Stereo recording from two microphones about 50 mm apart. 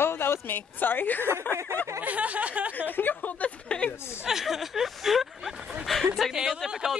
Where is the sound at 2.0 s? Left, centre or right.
Right.